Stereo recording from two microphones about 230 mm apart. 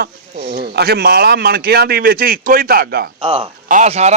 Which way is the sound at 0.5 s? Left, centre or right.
Right.